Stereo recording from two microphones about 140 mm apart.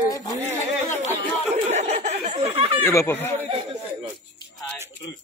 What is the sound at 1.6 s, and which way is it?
Speech, 50° right (ahead or behind).